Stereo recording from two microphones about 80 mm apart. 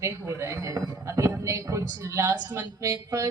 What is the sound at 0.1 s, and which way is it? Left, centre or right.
Speech, right.